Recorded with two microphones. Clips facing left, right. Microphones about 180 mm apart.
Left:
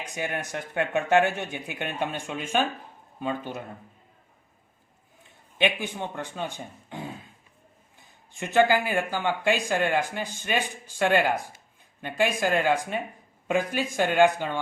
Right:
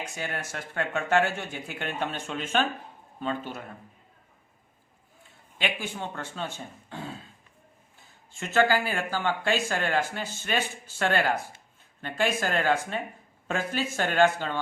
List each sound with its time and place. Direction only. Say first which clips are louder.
0.0 s speech: left 3 dB; 20° left (ahead or behind)
5.5 s speech: left 5 dB; 20° left (ahead or behind)